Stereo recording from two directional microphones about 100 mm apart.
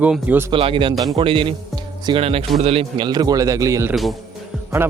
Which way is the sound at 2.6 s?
90° right.